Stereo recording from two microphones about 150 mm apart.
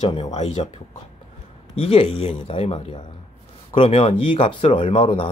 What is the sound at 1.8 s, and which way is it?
Speech, 40° left (ahead or behind).